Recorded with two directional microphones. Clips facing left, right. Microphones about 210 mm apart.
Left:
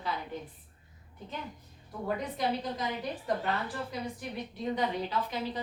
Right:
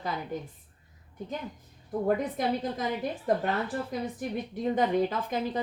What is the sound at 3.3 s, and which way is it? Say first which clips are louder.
A woman's voice: right 5 dB; 50° right (ahead or behind).